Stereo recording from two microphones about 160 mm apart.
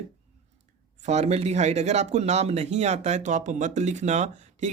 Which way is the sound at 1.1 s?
45° right (ahead or behind).